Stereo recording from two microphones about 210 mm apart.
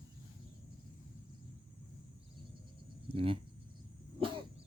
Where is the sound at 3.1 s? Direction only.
25° right (ahead or behind).